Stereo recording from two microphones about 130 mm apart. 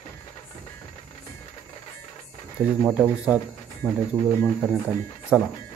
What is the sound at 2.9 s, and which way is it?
Speech, 10° right (ahead or behind).